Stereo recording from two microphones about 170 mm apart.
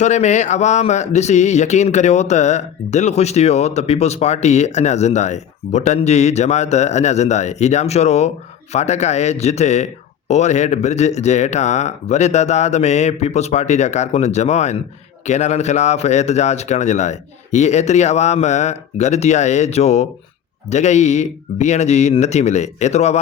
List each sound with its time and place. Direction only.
0.0 s speech: 45° left (ahead or behind)